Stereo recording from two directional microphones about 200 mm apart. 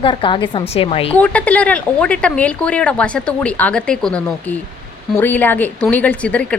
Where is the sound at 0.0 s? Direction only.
25° left (ahead or behind).